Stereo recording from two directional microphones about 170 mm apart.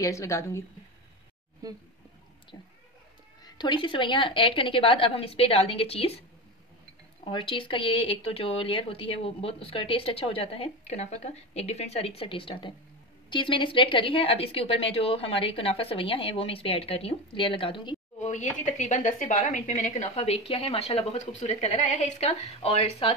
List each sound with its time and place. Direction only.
0.0 s a woman's voice: 20° left (ahead or behind)
1.6 s speech: 20° right (ahead or behind)
2.5 s speech: 20° left (ahead or behind)
7.2 s speech: 30° left (ahead or behind)
18.2 s a woman's voice: 45° left (ahead or behind)